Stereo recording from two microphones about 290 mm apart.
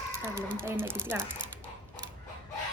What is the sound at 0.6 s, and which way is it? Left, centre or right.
Speech, centre.